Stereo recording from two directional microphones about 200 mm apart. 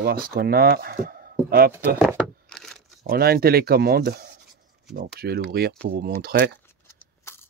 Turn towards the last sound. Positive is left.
turn(degrees=10)  # may be behind; listen again after turning